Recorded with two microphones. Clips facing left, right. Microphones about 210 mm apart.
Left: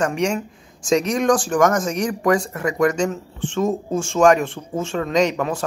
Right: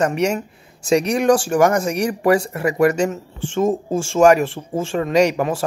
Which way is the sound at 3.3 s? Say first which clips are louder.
Right 3 dB; 30° right (ahead or behind).